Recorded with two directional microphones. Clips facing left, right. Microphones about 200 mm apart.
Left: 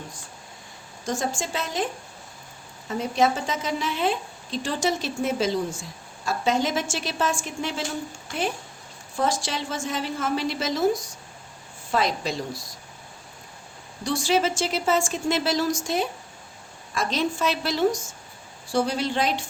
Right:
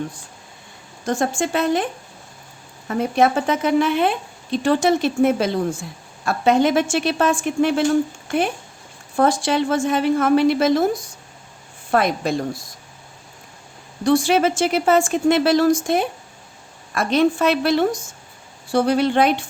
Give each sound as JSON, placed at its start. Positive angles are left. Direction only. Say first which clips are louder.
{"t": 1.0, "sound": "speech", "louder": "right 7 dB", "side_deg": -60}
{"t": 9.1, "sound": "speech", "louder": "right 8 dB", "side_deg": -55}
{"t": 14.0, "sound": "speech", "louder": "right 7 dB", "side_deg": -55}